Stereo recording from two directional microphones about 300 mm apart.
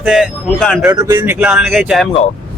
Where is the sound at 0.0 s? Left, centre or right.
Centre.